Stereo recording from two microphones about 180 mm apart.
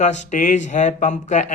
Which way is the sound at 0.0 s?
40° left (ahead or behind).